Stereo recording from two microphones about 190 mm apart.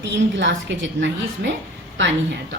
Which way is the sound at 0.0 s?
65° right (ahead or behind).